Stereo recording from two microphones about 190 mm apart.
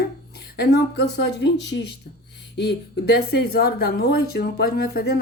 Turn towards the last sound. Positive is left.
turn(degrees=55)  # may be behind; listen again after turning